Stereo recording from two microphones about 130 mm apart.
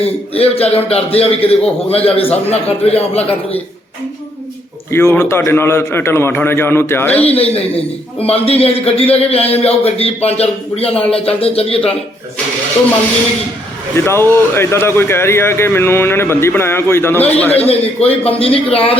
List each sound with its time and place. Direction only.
0.0 s speech: 50° left (ahead or behind)
4.9 s a man's voice: 20° left (ahead or behind)
7.3 s speech: 50° left (ahead or behind)
13.9 s speech: 20° left (ahead or behind)
18.3 s speech: 45° left (ahead or behind)